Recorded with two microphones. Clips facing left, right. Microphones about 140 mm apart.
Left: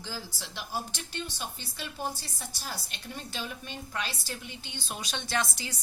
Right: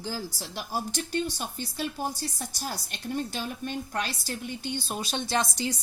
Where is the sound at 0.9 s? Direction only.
45° right (ahead or behind).